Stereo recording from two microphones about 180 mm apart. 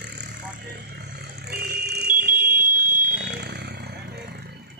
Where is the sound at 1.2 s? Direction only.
60° right (ahead or behind).